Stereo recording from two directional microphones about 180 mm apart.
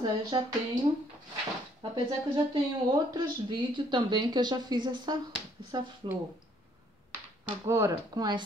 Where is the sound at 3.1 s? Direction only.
25° right (ahead or behind).